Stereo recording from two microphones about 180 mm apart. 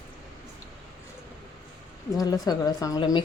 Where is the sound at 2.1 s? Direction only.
20° left (ahead or behind).